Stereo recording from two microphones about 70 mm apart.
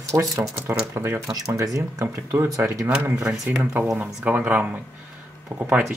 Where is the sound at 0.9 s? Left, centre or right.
Right.